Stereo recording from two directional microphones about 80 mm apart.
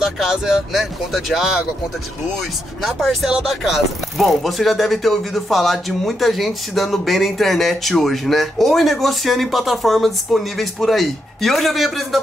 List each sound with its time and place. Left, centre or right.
0.0 s speech: centre
2.8 s speech: centre